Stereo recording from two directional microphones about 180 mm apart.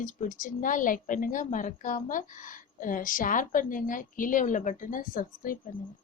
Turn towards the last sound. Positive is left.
turn(degrees=50)  # may be behind; listen again after turning